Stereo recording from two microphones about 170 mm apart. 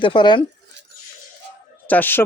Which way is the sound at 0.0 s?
30° left (ahead or behind).